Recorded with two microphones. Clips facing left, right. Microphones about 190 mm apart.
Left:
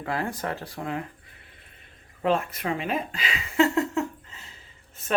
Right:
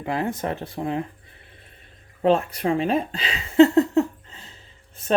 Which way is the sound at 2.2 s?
35° right (ahead or behind).